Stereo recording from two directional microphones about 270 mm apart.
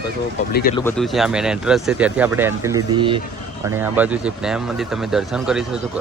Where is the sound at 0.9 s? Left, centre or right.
Centre.